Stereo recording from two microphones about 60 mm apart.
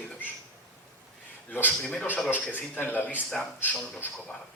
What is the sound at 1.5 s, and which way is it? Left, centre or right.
A man's voice, left.